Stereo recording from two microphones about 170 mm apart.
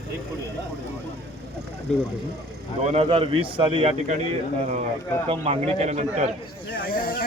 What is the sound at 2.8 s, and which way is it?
A man's voice, 35° right (ahead or behind).